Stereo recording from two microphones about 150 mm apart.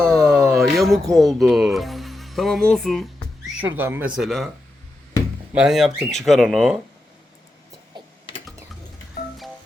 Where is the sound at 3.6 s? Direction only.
15° right (ahead or behind).